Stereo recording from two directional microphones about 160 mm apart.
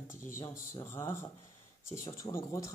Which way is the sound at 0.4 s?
20° left (ahead or behind).